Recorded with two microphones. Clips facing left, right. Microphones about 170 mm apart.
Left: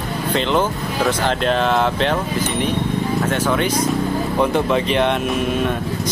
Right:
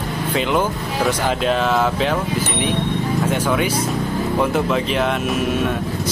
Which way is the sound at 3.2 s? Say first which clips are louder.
Right 1 dB; 10° right (ahead or behind).